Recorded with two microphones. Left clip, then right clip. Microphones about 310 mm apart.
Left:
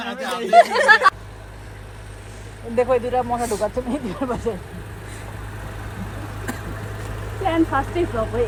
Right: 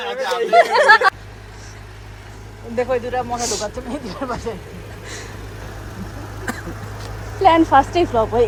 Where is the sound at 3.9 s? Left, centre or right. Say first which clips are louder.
Even; centre.